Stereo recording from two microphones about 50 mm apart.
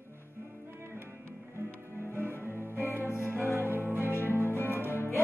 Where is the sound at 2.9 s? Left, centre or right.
Left.